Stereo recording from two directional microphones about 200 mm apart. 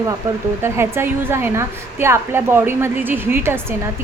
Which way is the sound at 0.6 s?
10° right (ahead or behind).